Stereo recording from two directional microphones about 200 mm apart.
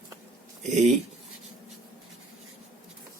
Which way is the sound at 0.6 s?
35° right (ahead or behind).